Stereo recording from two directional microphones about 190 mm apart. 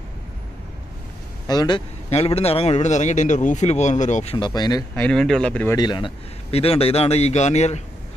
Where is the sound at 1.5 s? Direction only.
20° left (ahead or behind).